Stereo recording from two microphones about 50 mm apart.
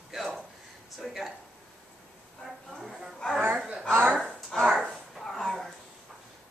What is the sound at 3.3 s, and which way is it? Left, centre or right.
Chuckle, right.